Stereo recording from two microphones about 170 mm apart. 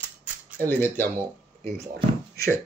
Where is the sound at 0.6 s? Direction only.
10° left (ahead or behind).